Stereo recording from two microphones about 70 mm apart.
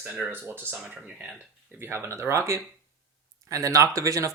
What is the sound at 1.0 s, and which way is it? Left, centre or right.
Speech, centre.